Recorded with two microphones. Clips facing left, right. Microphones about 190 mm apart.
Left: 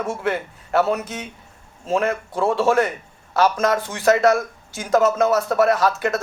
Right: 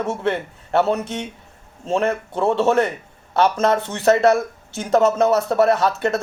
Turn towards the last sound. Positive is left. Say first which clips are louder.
# right 1 dB
turn(degrees=-25)  # may be behind; listen again after turning